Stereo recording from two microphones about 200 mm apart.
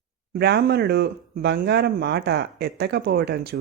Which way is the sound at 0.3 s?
55° right (ahead or behind).